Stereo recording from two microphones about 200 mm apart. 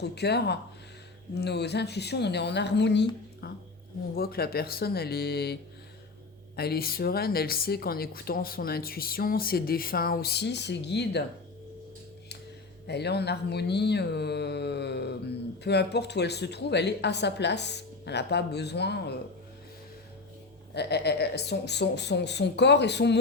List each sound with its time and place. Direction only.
0.0 s a woman's voice: 55° left (ahead or behind)
6.6 s a woman's voice: 50° left (ahead or behind)
12.9 s speech: 55° left (ahead or behind)
20.7 s speech: 55° left (ahead or behind)